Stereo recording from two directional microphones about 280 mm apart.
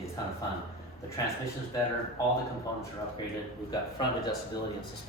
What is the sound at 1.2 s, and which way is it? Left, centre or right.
Speech, centre.